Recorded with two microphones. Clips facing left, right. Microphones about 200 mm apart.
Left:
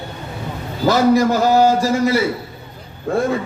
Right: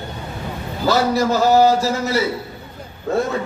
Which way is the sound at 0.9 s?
15° left (ahead or behind).